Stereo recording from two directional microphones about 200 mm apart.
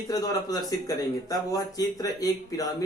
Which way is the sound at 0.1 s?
20° left (ahead or behind).